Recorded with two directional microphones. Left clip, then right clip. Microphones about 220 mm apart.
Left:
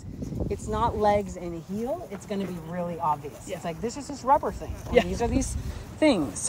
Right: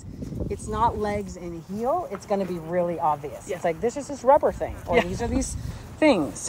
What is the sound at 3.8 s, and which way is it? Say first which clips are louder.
Speech: right 7 dB; 35° right (ahead or behind).